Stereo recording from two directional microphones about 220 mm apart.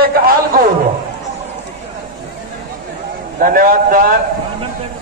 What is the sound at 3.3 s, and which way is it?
Speech, 40° right (ahead or behind).